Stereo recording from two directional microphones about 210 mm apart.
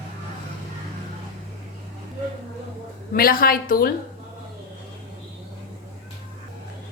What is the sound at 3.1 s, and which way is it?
Speech, 45° left (ahead or behind).